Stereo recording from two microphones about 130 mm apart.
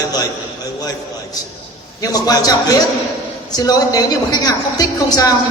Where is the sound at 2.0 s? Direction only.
30° left (ahead or behind).